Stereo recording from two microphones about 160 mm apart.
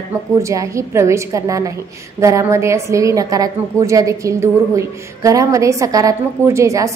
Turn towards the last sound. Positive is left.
turn(degrees=-20)  # may be behind; listen again after turning